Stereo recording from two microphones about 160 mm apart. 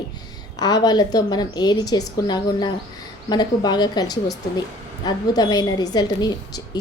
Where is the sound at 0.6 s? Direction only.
25° left (ahead or behind).